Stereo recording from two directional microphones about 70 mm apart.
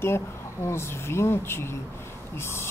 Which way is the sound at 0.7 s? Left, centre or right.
Left.